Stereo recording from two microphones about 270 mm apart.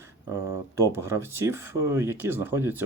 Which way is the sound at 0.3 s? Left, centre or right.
Centre.